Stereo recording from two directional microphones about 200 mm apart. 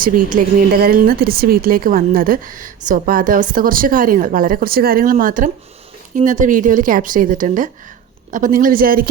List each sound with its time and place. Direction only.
0.0 s a woman's voice: 45° right (ahead or behind)